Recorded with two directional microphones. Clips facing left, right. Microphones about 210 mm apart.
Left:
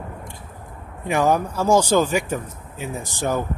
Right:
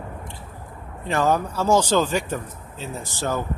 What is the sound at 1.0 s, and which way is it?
Speech, 15° left (ahead or behind).